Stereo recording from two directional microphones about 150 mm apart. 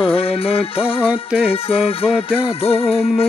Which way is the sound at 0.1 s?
40° left (ahead or behind).